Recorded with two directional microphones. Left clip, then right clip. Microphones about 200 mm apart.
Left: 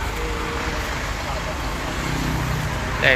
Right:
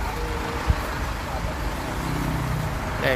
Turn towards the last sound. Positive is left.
turn(degrees=-10)  # may be behind; listen again after turning